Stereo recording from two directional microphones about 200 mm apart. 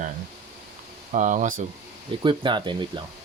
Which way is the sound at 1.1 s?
40° right (ahead or behind).